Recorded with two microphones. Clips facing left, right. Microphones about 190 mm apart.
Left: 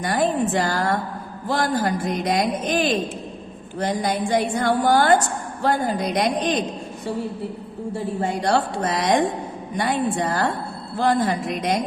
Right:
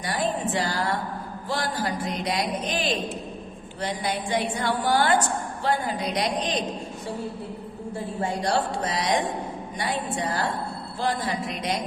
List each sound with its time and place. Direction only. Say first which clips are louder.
0.0 s a man's voice: left 6 dB; 50° left (ahead or behind)
8.2 s a man's voice: left 3 dB; 55° left (ahead or behind)